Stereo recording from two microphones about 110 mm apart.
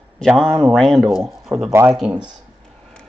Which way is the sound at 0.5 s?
25° right (ahead or behind).